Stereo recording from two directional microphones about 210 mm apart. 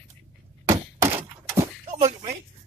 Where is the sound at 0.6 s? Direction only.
15° right (ahead or behind).